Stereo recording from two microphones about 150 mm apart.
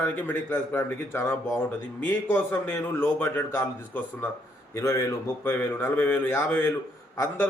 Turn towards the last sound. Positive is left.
turn(degrees=20)  # may be behind; listen again after turning